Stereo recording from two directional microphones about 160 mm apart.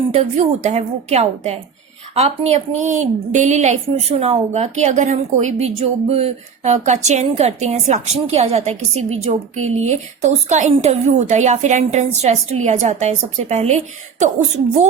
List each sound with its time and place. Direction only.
0.1 s a woman's voice: 45° right (ahead or behind)